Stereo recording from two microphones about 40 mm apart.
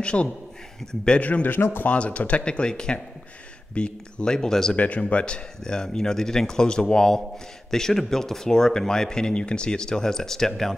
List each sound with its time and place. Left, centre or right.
0.0 s speech: left
1.2 s speech: left; by 4.7 s centre
4.7 s speech: left; by 10.8 s centre